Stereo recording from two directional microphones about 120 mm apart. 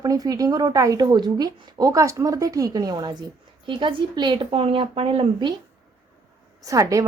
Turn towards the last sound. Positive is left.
turn(degrees=-30)  # may be behind; listen again after turning